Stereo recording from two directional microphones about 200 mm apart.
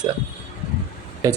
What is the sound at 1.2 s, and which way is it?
Speech, 20° right (ahead or behind).